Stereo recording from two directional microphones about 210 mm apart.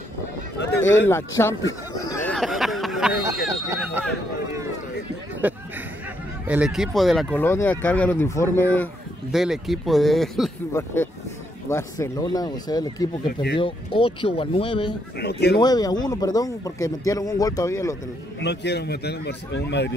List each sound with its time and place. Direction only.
0.7 s speech: 10° left (ahead or behind)
1.7 s a sound: 15° left (ahead or behind)
2.3 s a sound: centre (ahead or behind)
3.3 s speech: 15° right (ahead or behind)
5.4 s speech: 5° right (ahead or behind)
7.4 s speech: 10° left (ahead or behind)
9.3 s speech: centre (ahead or behind)
10.7 s speech: 10° left (ahead or behind)
15.1 s a man's voice: 50° left (ahead or behind)
15.6 s speech: 20° left (ahead or behind)
18.4 s a man's voice: 55° left (ahead or behind)